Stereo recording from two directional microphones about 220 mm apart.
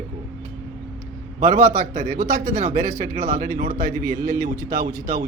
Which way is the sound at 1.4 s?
35° right (ahead or behind).